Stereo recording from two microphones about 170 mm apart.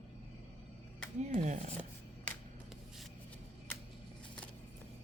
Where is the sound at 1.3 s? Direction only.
45° right (ahead or behind).